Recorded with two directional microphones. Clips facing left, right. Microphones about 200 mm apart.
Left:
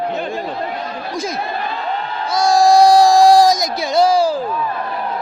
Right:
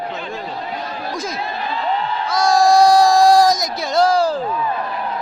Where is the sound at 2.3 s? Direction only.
25° left (ahead or behind).